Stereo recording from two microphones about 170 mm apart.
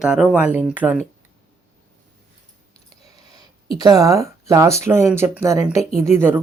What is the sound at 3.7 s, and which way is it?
Speech, 20° right (ahead or behind).